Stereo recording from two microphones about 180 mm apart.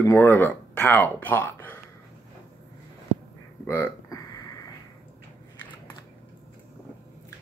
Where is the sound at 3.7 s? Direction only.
15° left (ahead or behind).